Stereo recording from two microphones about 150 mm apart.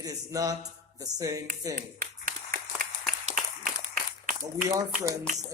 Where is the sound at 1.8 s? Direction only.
65° right (ahead or behind).